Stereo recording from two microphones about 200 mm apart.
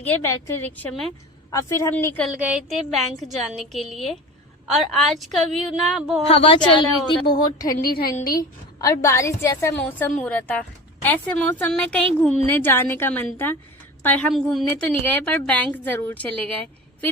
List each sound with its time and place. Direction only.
0.0 s a woman's voice: 10° left (ahead or behind)
1.5 s a woman's voice: 15° left (ahead or behind)
2.2 s a woman's voice: 5° right (ahead or behind)
6.2 s a woman's voice: 30° left (ahead or behind)
7.8 s a woman's voice: 50° left (ahead or behind)
8.3 s a woman's voice: 15° left (ahead or behind)